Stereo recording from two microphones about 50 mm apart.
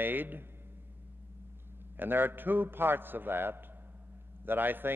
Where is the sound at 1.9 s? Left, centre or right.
Right.